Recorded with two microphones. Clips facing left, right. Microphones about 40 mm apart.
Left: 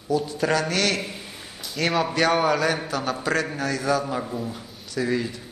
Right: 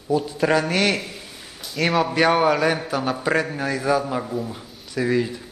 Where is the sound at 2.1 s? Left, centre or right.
Centre.